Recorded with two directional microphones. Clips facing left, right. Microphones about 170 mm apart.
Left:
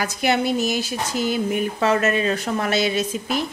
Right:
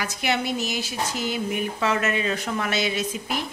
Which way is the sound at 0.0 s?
45° left (ahead or behind).